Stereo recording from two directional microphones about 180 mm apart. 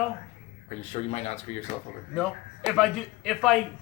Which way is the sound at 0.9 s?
40° left (ahead or behind).